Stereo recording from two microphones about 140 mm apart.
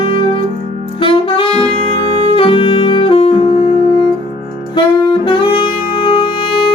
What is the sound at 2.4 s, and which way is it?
Saxophone, 40° left (ahead or behind).